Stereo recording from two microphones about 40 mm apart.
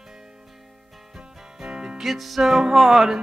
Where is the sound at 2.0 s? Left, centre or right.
Centre.